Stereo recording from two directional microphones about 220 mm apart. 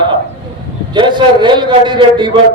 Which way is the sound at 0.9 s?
20° right (ahead or behind).